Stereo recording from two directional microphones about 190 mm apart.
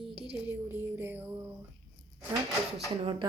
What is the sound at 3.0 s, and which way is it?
Speech, 25° right (ahead or behind).